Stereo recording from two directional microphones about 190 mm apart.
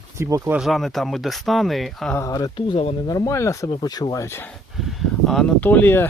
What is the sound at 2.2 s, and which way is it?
Speech, 20° left (ahead or behind).